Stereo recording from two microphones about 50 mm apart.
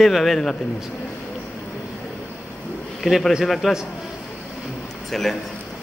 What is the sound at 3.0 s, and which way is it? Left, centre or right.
Speech, centre.